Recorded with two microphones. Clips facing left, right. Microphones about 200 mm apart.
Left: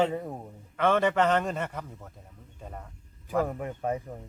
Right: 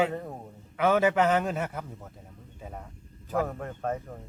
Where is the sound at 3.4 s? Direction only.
10° left (ahead or behind).